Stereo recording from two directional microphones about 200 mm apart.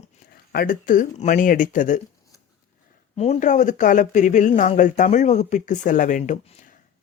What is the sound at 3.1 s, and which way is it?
Speech, 35° left (ahead or behind).